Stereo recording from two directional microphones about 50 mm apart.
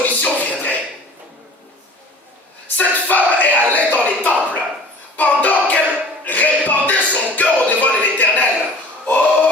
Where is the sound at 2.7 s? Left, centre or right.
Left.